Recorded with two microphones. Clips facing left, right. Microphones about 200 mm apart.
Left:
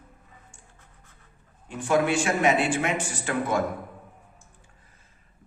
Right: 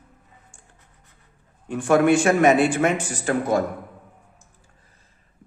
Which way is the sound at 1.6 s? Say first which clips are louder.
Right 6 dB; 55° right (ahead or behind).